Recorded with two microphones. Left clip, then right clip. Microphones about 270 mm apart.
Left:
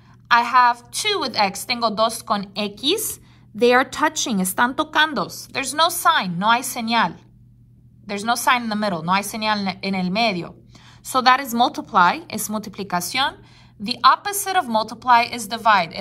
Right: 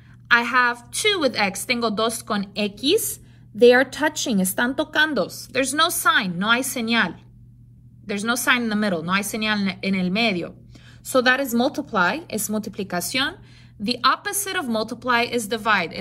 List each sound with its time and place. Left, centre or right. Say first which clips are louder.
0.3 s a woman's voice: left 3 dB; centre
5.0 s a woman's voice: even; left
8.1 s a woman's voice: left 2 dB; centre